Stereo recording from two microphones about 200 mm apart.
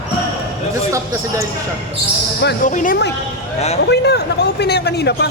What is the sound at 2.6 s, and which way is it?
Speech, 40° left (ahead or behind).